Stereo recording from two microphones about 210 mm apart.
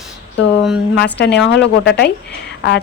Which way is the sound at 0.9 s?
55° left (ahead or behind).